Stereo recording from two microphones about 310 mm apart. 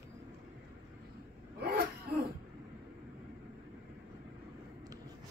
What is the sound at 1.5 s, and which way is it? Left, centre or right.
Throat clearing, right.